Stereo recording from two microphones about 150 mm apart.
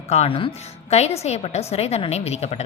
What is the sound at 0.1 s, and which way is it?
A woman's voice, 40° left (ahead or behind).